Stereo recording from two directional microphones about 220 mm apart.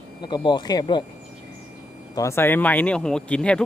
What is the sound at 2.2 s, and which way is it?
Speech, 10° left (ahead or behind).